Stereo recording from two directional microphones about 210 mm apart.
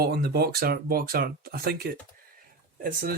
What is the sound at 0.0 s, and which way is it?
Speech, 50° right (ahead or behind).